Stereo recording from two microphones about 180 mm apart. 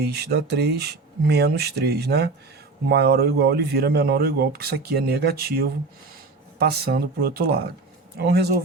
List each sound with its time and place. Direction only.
0.1 s speech: 65° right (ahead or behind)